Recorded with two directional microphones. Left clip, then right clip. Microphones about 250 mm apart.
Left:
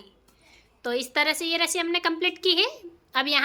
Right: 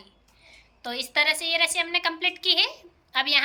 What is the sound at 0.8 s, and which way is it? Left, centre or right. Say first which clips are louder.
A woman's voice: even; centre.